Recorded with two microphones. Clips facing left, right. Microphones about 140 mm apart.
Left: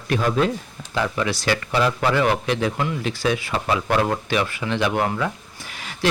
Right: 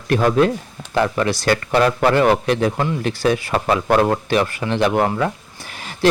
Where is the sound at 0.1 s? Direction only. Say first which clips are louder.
Right 5 dB; 55° right (ahead or behind).